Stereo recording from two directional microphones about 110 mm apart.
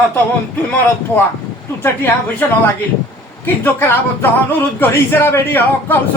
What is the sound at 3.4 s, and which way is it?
Speech, 20° left (ahead or behind).